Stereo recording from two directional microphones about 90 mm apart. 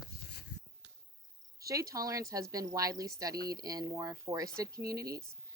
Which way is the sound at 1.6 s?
40° right (ahead or behind).